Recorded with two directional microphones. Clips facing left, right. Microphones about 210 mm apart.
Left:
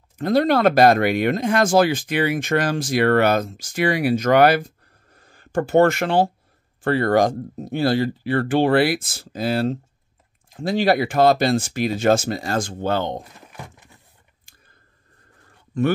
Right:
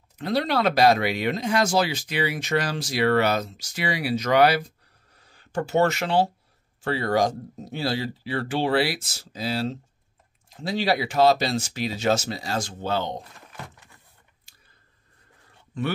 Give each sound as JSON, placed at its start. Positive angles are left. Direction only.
{"t": 0.2, "sound": "speech", "side_deg": 50}